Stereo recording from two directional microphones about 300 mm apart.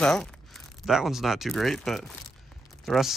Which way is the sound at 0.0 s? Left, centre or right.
Centre.